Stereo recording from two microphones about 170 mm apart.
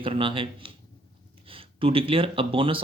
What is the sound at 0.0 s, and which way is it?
Speech, 30° right (ahead or behind).